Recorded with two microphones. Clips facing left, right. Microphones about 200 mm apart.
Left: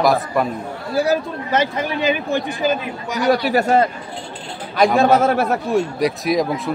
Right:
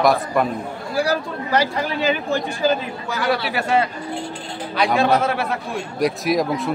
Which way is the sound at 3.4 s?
45° left (ahead or behind).